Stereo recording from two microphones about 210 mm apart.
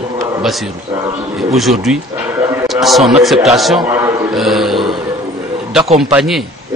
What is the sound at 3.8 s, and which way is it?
Speech, 15° right (ahead or behind).